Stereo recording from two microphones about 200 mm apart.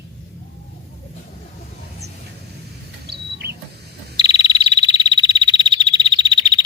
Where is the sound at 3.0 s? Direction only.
55° right (ahead or behind).